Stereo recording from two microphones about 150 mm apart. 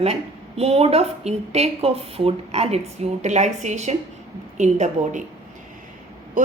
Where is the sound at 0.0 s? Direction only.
45° right (ahead or behind).